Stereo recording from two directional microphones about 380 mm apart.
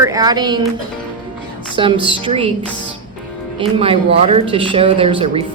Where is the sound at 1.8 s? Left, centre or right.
Centre.